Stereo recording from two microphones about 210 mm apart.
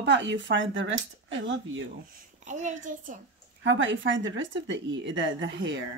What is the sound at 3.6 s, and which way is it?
A woman's voice, 60° right (ahead or behind).